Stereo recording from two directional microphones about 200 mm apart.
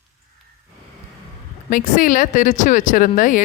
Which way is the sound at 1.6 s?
40° left (ahead or behind).